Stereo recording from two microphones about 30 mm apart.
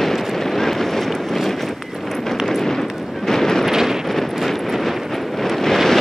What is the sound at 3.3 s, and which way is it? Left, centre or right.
Vehicle, centre.